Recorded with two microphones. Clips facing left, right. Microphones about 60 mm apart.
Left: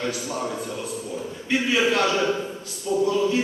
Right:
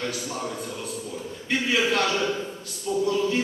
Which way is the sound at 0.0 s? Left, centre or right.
Centre.